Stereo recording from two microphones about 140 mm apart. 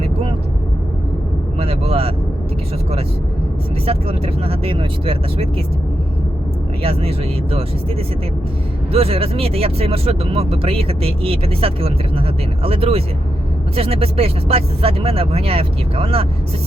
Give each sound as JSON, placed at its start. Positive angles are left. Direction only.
{"t": 0.0, "sound": "vehicle", "side_deg": -45}
{"t": 1.5, "sound": "vehicle", "side_deg": -45}
{"t": 3.8, "sound": "speech", "side_deg": -45}
{"t": 8.9, "sound": "speech", "side_deg": -45}